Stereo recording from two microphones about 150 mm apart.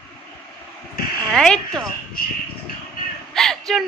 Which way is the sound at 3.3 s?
Centre (ahead or behind).